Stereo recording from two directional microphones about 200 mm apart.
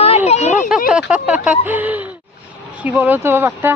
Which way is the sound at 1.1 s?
5° right (ahead or behind).